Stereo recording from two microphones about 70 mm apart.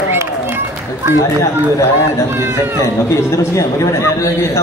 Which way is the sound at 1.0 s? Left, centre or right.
Right.